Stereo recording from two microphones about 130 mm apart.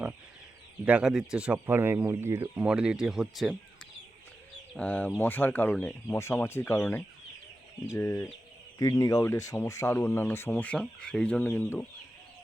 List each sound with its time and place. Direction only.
0.9 s speech: 5° right (ahead or behind)
1.5 s speech: 15° right (ahead or behind)
2.6 s speech: 5° right (ahead or behind)
4.8 s speech: 10° left (ahead or behind)